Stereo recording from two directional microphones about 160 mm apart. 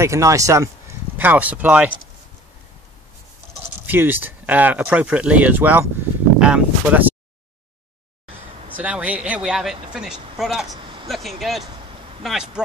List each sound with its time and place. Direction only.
0.0 s speech: 20° right (ahead or behind)
3.8 s speech: 10° right (ahead or behind)
8.7 s speech: 10° right (ahead or behind)
10.7 s a sound: 30° right (ahead or behind)
11.1 s speech: centre (ahead or behind)